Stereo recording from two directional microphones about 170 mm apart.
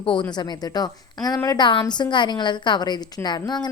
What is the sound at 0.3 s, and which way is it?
Speech, 25° left (ahead or behind).